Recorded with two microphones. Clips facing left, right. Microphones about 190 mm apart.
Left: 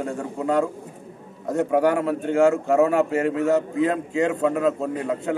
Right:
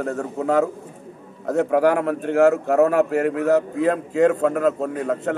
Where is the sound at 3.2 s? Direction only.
65° right (ahead or behind).